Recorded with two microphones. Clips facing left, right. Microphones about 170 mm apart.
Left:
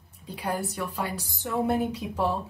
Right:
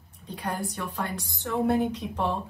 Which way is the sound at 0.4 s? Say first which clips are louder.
Left 2 dB; 5° left (ahead or behind).